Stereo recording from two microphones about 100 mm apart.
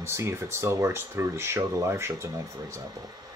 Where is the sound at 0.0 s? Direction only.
25° right (ahead or behind).